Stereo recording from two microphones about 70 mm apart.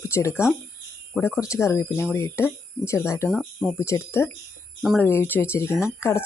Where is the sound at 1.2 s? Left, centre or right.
Left.